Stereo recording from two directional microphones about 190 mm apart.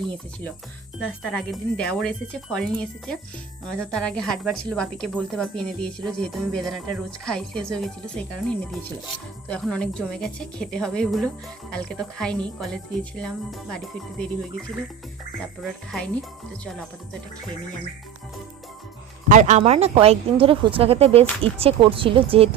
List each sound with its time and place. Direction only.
1.2 s a woman's voice: centre (ahead or behind)
15.6 s a woman's voice: centre (ahead or behind)
19.3 s a woman's voice: 40° right (ahead or behind)